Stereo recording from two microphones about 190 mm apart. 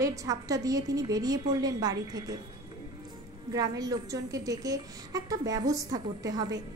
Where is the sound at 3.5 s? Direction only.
20° right (ahead or behind).